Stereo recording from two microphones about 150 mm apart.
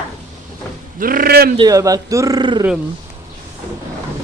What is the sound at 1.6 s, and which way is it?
Speech, 25° right (ahead or behind).